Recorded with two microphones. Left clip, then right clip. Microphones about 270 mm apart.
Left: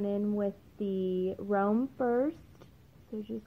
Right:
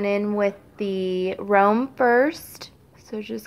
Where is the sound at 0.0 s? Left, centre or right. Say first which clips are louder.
Right 10 dB; centre.